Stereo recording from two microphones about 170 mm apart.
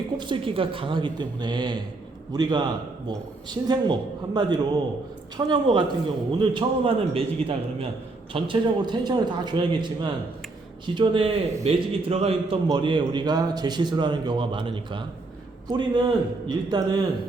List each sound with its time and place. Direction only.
0.2 s a man's voice: 30° right (ahead or behind)